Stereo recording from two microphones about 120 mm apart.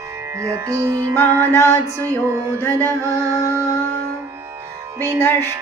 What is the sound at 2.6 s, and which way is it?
Mantra, 20° left (ahead or behind).